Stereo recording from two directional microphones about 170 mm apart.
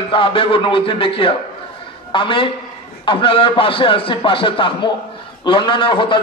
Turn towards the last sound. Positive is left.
turn(degrees=30)  # may be behind; listen again after turning